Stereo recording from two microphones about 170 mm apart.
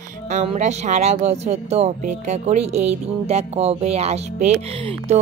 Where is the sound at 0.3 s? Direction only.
40° right (ahead or behind).